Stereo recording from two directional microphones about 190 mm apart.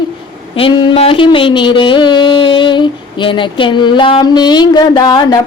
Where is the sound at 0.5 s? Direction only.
25° left (ahead or behind).